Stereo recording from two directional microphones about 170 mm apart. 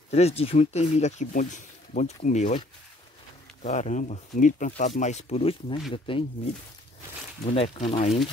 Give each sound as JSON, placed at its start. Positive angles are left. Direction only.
{"t": 0.1, "sound": "speech", "side_deg": 35}
{"t": 3.6, "sound": "speech", "side_deg": 45}